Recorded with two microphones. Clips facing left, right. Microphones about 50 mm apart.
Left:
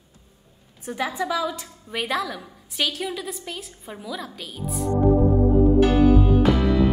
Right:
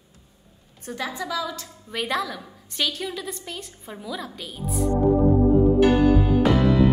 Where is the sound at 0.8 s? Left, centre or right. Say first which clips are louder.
Left 4 dB; centre.